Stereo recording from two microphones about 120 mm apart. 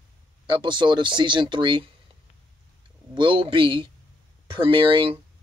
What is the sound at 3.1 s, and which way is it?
Speech, 45° right (ahead or behind).